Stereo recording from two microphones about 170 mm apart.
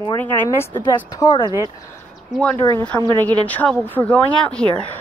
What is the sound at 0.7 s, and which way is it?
Speech, 25° left (ahead or behind).